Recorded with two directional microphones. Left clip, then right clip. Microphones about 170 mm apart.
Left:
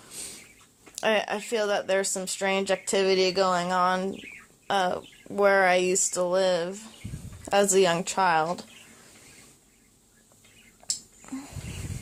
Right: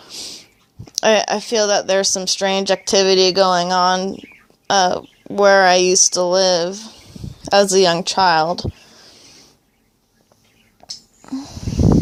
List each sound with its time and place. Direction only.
0.0 s whispering: 40° right (ahead or behind)
0.9 s speech: 50° right (ahead or behind)
10.8 s whispering: 40° right (ahead or behind)
11.2 s a sound: 35° right (ahead or behind)